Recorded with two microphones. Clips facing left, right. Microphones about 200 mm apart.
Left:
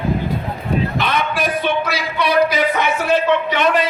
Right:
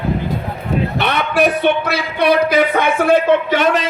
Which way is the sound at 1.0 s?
70° right (ahead or behind).